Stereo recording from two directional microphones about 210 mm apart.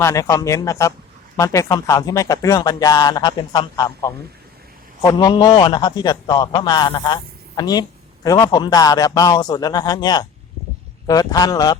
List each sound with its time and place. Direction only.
0.0 s a man's voice: 15° left (ahead or behind)